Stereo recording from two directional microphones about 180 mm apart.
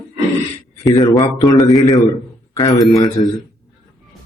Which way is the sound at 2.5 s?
15° left (ahead or behind).